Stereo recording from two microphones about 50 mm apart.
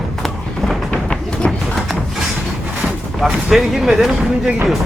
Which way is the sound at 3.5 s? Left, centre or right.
Centre.